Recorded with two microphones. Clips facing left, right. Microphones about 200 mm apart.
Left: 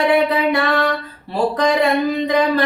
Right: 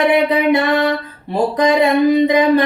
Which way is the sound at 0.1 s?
20° right (ahead or behind).